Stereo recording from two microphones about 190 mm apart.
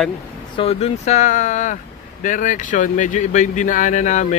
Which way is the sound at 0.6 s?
30° left (ahead or behind).